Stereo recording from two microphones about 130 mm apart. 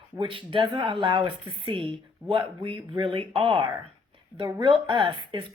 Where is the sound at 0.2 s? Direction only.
40° right (ahead or behind).